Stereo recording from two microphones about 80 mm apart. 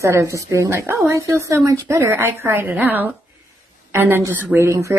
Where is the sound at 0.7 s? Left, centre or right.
Right.